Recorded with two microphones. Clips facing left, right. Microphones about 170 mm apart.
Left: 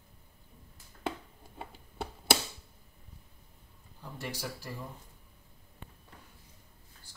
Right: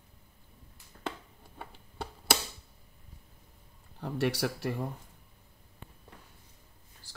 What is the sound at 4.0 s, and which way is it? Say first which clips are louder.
Speech: right 10 dB; 70° right (ahead or behind).